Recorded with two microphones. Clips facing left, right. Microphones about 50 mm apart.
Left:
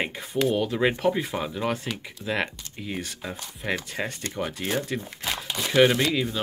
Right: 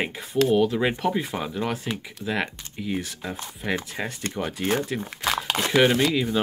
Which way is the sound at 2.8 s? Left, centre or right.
Centre.